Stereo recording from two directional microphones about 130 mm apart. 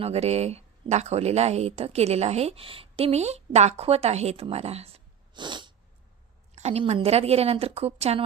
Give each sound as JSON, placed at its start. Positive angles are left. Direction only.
{"t": 0.0, "sound": "speech", "side_deg": -55}
{"t": 5.3, "sound": "sneeze", "side_deg": -35}
{"t": 6.6, "sound": "speech", "side_deg": -55}